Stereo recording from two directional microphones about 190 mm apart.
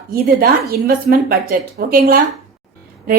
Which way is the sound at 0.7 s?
55° right (ahead or behind).